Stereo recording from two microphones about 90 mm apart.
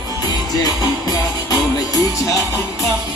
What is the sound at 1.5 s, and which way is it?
Music, 40° left (ahead or behind).